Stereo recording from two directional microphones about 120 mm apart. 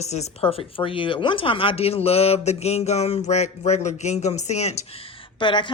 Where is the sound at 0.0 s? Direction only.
70° left (ahead or behind).